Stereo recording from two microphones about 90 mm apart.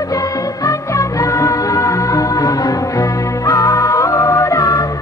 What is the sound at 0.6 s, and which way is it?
Music, 35° left (ahead or behind).